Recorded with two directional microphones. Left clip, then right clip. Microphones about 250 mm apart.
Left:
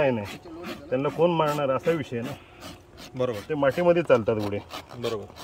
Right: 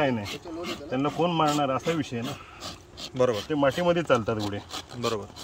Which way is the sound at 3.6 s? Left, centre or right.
Left.